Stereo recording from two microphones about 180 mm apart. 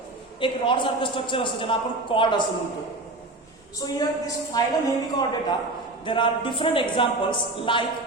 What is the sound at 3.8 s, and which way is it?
A woman's voice, 20° left (ahead or behind).